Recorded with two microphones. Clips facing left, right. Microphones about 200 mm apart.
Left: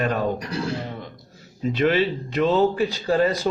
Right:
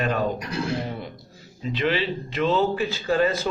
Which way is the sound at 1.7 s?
45° left (ahead or behind).